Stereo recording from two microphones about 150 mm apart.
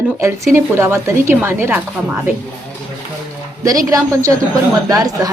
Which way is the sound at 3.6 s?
20° right (ahead or behind).